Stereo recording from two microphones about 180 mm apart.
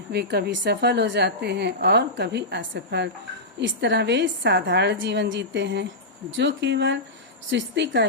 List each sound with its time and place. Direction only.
0.1 s a woman's voice: 65° right (ahead or behind)
6.3 s a woman's voice: 80° right